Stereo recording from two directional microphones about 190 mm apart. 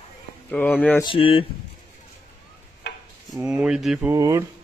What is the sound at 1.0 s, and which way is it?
Speech, 30° left (ahead or behind).